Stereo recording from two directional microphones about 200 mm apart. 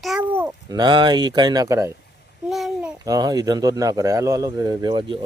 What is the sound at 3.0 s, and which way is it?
Speech, 20° right (ahead or behind).